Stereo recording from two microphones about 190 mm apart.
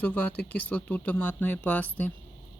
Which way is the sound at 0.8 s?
10° left (ahead or behind).